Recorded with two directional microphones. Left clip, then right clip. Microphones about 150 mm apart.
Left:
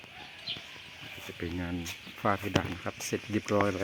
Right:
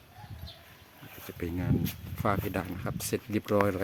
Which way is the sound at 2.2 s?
15° right (ahead or behind).